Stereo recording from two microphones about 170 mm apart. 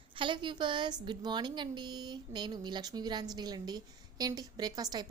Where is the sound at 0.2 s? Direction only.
30° right (ahead or behind).